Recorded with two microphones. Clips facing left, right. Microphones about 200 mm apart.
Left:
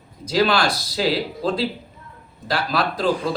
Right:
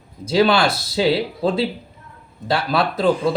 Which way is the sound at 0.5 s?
25° right (ahead or behind).